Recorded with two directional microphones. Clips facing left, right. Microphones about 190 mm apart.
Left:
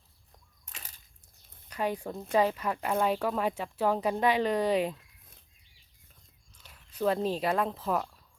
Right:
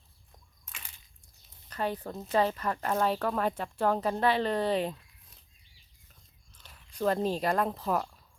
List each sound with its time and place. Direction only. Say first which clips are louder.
0.7 s a sound: left 1 dB; 40° left (ahead or behind)
1.7 s speech: left 1 dB; 10° left (ahead or behind)
6.5 s speech: right 1 dB; 5° left (ahead or behind)